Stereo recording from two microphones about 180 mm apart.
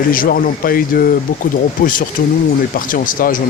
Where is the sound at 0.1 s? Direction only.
50° left (ahead or behind).